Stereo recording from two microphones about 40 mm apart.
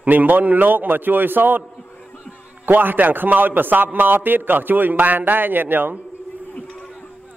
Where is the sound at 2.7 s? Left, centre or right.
Right.